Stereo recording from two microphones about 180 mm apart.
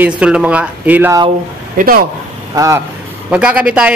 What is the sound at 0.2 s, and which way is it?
Speech, 5° right (ahead or behind).